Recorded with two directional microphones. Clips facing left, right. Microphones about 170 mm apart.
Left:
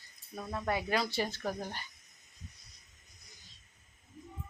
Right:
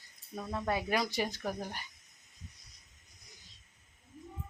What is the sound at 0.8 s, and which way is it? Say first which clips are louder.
Speech: even; 15° right (ahead or behind).